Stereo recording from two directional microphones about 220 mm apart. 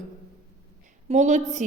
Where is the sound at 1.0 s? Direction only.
30° right (ahead or behind).